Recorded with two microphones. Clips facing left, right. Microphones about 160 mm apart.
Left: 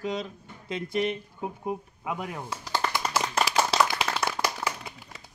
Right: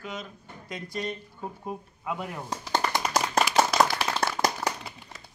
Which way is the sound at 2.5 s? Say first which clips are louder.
Right 3 dB; 45° right (ahead or behind).